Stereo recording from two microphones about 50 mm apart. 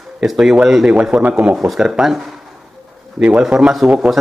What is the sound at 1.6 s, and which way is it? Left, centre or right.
Speech, centre.